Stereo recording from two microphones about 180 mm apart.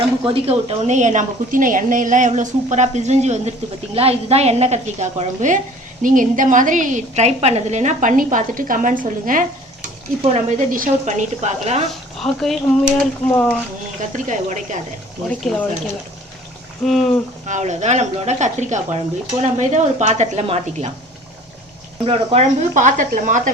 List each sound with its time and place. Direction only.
0.3 s a woman's voice: 30° right (ahead or behind); by 9.5 s 50° right (ahead or behind)
10.2 s a woman's voice: 35° right (ahead or behind)
11.9 s speech: centre (ahead or behind)
14.0 s a woman's voice: 40° right (ahead or behind)
15.3 s speech: 5° left (ahead or behind)
16.8 s speech: centre (ahead or behind)
17.4 s a woman's voice: 40° right (ahead or behind)
22.0 s a woman's voice: 35° right (ahead or behind)